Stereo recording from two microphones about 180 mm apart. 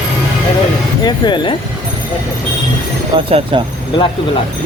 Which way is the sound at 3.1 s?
30° right (ahead or behind).